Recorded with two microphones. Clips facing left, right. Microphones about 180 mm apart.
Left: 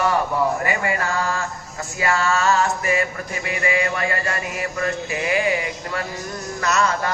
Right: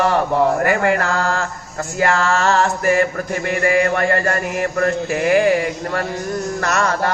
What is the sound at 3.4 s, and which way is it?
Mantra, 50° right (ahead or behind).